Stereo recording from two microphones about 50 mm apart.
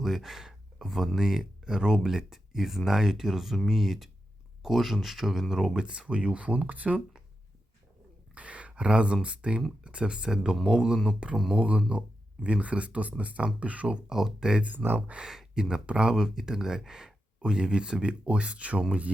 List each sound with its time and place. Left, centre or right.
0.0 s speech: centre
5.7 s speech: centre
8.4 s speech: right; by 11.6 s centre
11.9 s speech: right
13.8 s speech: centre
14.8 s speech: right
15.2 s speech: centre
16.1 s speech: centre